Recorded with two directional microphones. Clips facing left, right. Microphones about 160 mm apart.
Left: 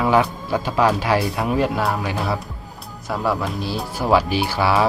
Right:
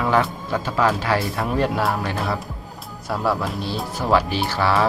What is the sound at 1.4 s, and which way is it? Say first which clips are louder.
Speech: left 1 dB; centre (ahead or behind).